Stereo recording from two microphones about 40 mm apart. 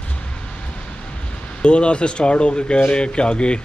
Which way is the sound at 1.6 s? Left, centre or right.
Left.